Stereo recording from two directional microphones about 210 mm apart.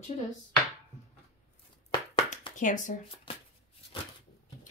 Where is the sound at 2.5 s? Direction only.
35° left (ahead or behind).